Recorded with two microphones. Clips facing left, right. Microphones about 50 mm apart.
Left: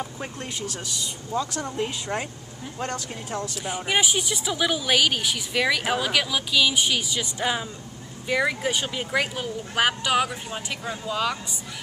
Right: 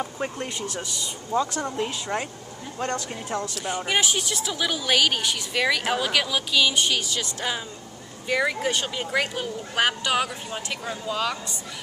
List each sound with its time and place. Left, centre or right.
0.0 s speech: centre
2.1 s speech: centre
3.3 s speech: centre